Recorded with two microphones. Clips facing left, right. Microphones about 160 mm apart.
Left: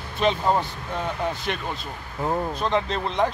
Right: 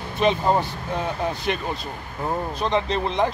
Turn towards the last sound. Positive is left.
turn(degrees=0)  # may be behind; listen again after turning